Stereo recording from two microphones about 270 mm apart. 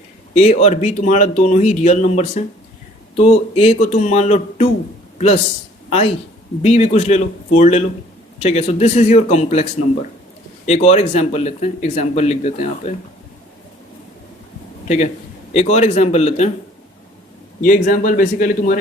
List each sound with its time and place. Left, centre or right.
0.3 s speech: left
6.6 s speech: left
14.8 s speech: left
17.6 s speech: left